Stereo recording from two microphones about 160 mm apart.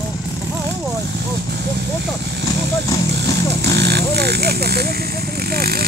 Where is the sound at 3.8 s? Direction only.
90° right.